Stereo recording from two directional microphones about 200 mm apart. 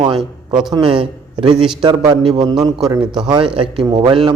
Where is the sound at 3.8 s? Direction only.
20° right (ahead or behind).